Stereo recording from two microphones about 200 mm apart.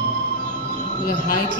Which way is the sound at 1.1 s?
50° left (ahead or behind).